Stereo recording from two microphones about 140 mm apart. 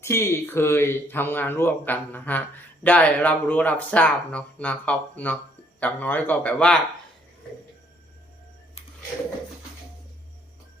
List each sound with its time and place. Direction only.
0.0 s speech: 20° left (ahead or behind)